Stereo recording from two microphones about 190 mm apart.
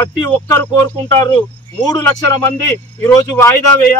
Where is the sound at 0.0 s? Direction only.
15° left (ahead or behind).